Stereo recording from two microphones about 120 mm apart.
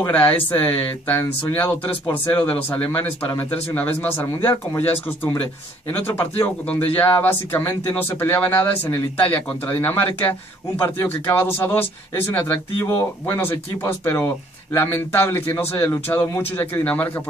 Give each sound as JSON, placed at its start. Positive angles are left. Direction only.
{"t": 0.1, "sound": "speech", "side_deg": 15}
{"t": 5.9, "sound": "speech", "side_deg": 15}